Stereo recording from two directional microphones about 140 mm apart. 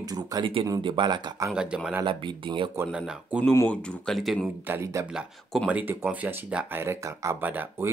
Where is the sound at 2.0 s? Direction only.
35° right (ahead or behind).